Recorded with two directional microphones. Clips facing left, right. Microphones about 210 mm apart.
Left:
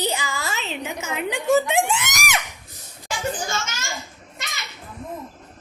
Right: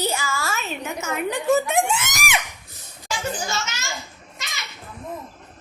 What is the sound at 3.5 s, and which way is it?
Speech, 50° left (ahead or behind).